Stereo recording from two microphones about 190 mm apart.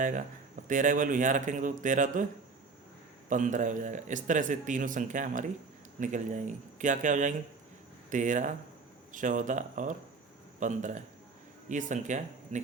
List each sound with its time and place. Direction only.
0.7 s a man's voice: 45° right (ahead or behind)
3.2 s a man's voice: 40° right (ahead or behind)